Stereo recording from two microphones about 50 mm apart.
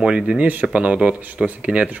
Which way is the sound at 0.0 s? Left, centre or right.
Right.